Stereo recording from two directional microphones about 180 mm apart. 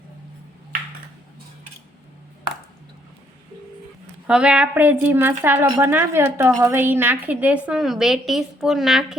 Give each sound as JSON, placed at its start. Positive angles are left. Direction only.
{"t": 4.3, "sound": "a woman's voice", "side_deg": -5}
{"t": 5.6, "sound": "a woman's voice", "side_deg": -20}